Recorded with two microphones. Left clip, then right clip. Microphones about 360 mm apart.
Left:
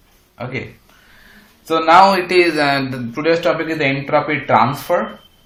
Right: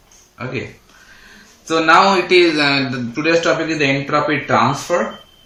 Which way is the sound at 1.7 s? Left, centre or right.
Centre.